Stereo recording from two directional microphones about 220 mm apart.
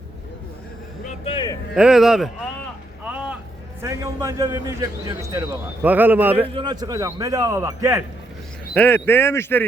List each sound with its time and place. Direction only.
1.0 s speech: 25° left (ahead or behind)
1.7 s speech: 5° right (ahead or behind)
3.0 s vehicle: 5° right (ahead or behind)
3.8 s a man's voice: 15° right (ahead or behind)
6.6 s a man's voice: 20° right (ahead or behind)
8.7 s speech: 10° left (ahead or behind)